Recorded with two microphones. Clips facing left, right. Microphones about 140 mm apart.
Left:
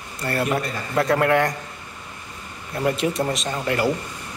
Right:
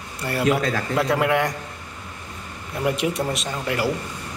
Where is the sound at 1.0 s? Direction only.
5° right (ahead or behind).